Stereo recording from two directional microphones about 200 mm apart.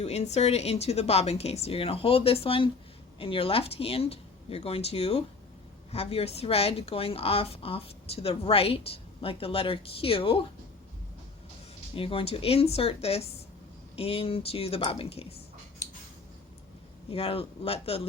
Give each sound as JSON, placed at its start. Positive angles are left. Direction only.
{"t": 0.0, "sound": "speech", "side_deg": 30}
{"t": 11.9, "sound": "speech", "side_deg": 25}
{"t": 17.1, "sound": "speech", "side_deg": 30}